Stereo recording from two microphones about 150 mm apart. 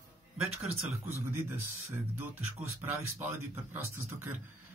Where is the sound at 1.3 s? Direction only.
15° right (ahead or behind).